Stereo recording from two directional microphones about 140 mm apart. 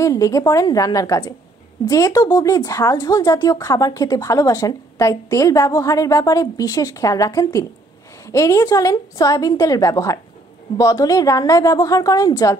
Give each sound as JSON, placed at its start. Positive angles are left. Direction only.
{"t": 0.0, "sound": "speech", "side_deg": 25}